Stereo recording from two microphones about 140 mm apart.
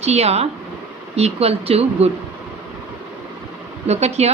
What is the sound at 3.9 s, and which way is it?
Speech, 50° right (ahead or behind).